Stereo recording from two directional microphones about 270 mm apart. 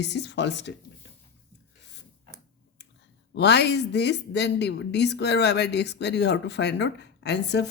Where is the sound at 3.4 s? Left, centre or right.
Left.